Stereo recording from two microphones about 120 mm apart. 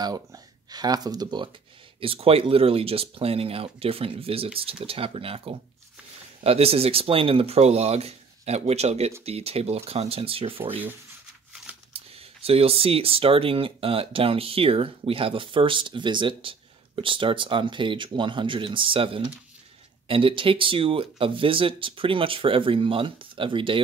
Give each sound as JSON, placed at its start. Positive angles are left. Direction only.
{"t": 0.0, "sound": "speech", "side_deg": -30}
{"t": 2.0, "sound": "speech", "side_deg": -50}
{"t": 11.9, "sound": "speech", "side_deg": -55}